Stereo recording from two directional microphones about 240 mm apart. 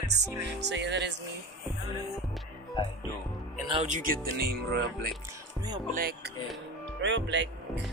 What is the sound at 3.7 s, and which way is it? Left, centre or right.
Speech, right.